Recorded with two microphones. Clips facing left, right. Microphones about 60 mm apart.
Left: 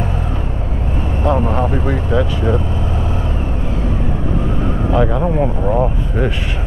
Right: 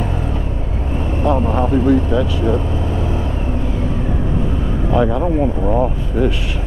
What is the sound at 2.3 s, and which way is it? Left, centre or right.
Vehicle, left.